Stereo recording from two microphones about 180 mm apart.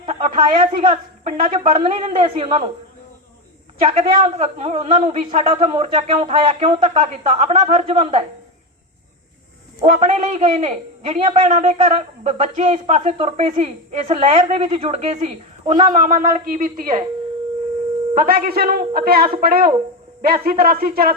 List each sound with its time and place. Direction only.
0.0 s a man's voice: 35° right (ahead or behind)
3.8 s a man's voice: 35° right (ahead or behind)
10.0 s a man's voice: 40° right (ahead or behind)
11.4 s a man's voice: 40° right (ahead or behind)
18.1 s speech: 50° right (ahead or behind)